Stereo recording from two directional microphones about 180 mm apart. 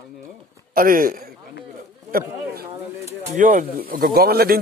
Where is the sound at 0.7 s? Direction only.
50° right (ahead or behind).